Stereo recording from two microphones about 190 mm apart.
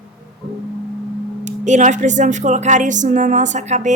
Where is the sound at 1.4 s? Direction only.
40° right (ahead or behind).